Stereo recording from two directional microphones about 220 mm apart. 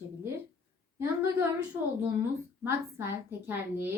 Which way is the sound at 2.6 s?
10° right (ahead or behind).